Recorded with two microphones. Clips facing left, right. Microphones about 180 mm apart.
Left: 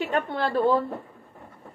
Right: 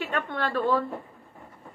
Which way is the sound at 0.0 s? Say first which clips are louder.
Left 4 dB; 40° left (ahead or behind).